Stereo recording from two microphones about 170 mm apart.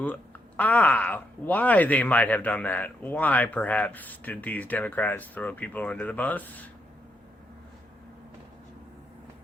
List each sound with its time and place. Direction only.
0.0 s speech: 10° left (ahead or behind)